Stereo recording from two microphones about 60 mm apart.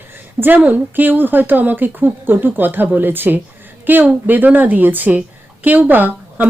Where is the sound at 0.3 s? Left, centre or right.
Right.